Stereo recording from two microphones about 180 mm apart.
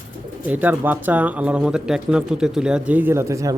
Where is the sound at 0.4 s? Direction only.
10° right (ahead or behind).